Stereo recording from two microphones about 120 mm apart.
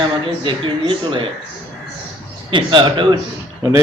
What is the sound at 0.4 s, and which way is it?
Speech, 45° right (ahead or behind).